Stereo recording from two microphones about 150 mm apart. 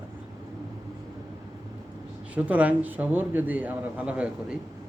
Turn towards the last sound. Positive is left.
turn(degrees=-10)  # may be behind; listen again after turning